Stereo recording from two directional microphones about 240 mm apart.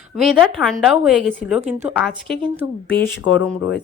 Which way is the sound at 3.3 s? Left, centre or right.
Left.